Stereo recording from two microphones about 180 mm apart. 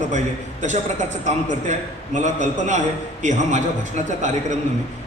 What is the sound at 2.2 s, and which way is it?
A man's voice, 40° right (ahead or behind).